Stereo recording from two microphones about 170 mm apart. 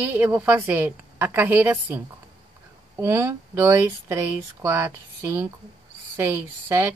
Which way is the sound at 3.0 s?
15° right (ahead or behind).